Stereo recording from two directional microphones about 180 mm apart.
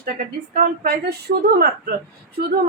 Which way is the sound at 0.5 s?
55° right (ahead or behind).